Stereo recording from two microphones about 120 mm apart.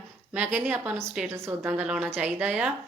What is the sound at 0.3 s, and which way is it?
A woman's voice, 15° right (ahead or behind).